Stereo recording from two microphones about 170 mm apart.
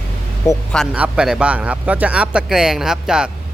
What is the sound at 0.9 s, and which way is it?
Speech, 5° right (ahead or behind).